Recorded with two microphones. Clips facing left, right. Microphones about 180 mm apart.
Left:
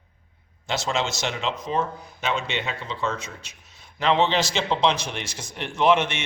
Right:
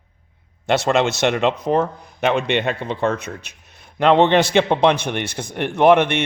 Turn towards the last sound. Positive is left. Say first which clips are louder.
# right 7 dB
turn(degrees=-60)  # may be behind; listen again after turning